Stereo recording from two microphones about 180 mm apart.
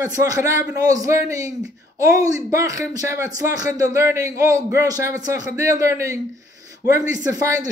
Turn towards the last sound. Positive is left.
turn(degrees=-20)  # may be behind; listen again after turning